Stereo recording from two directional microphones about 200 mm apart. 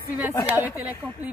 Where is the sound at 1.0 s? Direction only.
10° right (ahead or behind).